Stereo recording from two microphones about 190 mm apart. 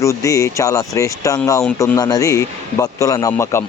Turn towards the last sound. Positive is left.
turn(degrees=15)  # may be behind; listen again after turning